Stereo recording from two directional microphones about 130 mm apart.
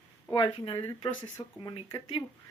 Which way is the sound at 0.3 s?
40° left (ahead or behind).